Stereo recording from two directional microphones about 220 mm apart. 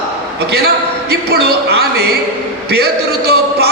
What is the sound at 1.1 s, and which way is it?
Speech, 45° right (ahead or behind).